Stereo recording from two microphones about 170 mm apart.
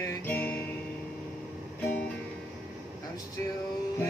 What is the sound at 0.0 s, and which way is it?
Music, 15° left (ahead or behind).